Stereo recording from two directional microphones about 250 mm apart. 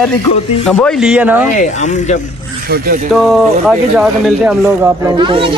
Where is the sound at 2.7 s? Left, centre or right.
Right.